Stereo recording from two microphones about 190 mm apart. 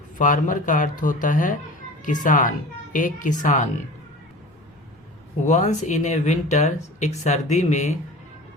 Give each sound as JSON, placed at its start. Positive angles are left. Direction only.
{"t": 0.2, "sound": "speech", "side_deg": 45}
{"t": 5.5, "sound": "speech", "side_deg": 40}